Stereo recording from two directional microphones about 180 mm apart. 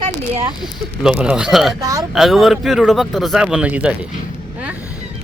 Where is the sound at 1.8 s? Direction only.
20° right (ahead or behind).